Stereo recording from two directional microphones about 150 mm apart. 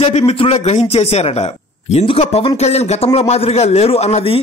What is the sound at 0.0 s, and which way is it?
A man's voice, 40° left (ahead or behind).